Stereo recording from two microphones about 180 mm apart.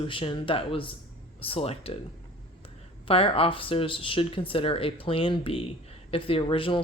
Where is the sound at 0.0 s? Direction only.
30° left (ahead or behind).